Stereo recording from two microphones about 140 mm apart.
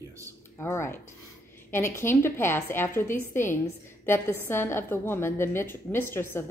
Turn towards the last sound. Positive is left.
turn(degrees=15)  # may be behind; listen again after turning